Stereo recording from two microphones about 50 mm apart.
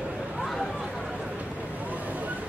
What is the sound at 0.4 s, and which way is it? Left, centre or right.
Chatter, centre.